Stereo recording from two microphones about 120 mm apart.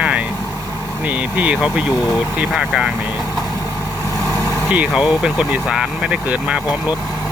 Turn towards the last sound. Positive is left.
turn(degrees=-10)  # may be behind; listen again after turning